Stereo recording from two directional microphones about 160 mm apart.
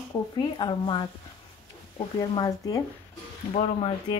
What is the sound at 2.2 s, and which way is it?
Speech, 25° left (ahead or behind).